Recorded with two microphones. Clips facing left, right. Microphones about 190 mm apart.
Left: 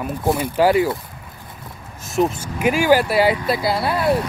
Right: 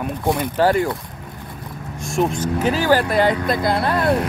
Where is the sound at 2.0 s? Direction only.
Centre (ahead or behind).